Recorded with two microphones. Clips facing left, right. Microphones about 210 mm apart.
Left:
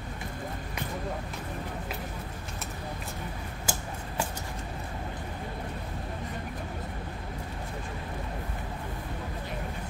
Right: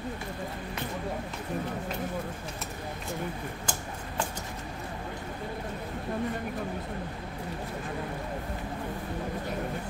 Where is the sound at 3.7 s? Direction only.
10° left (ahead or behind).